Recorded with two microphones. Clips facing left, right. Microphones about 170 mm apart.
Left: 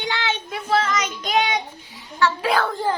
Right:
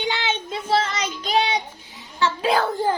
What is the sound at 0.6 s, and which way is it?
Child singing, 30° right (ahead or behind).